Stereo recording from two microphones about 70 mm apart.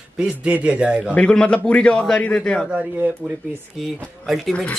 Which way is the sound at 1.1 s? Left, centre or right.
Centre.